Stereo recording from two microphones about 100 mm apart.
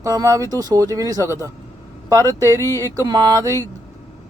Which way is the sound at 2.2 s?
25° left (ahead or behind).